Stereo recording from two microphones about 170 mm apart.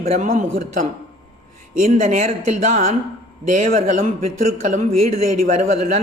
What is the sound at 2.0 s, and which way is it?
Speech, 45° right (ahead or behind).